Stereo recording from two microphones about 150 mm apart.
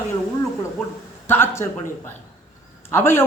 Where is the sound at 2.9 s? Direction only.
15° left (ahead or behind).